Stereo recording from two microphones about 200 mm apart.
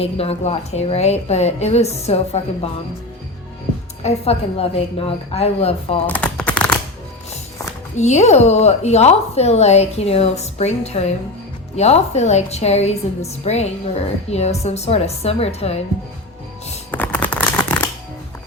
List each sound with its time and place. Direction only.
0.0 s a woman's voice: 30° left (ahead or behind)
4.0 s a woman's voice: 30° left (ahead or behind)
6.1 s typing: 5° left (ahead or behind)
7.9 s a woman's voice: 35° left (ahead or behind)
16.9 s a sound: 10° left (ahead or behind)